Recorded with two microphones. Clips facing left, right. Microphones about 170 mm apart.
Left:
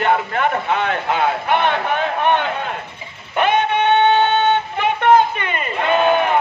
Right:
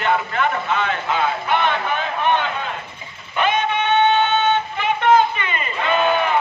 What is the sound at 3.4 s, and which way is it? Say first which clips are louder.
Music: left 3 dB; 60° left (ahead or behind).